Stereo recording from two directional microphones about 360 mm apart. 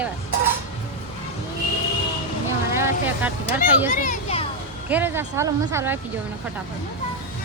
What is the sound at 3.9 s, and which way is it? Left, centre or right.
Children playing, left.